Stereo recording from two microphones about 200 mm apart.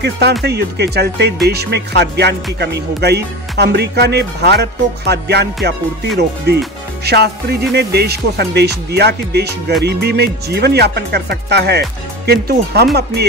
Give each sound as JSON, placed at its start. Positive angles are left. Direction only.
{"t": 0.0, "sound": "music", "side_deg": -55}
{"t": 12.3, "sound": "speech", "side_deg": -55}